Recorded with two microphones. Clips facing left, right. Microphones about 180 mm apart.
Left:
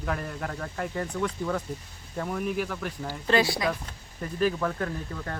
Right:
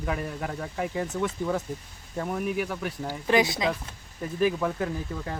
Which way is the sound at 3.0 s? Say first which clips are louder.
Right 1 dB; 15° right (ahead or behind).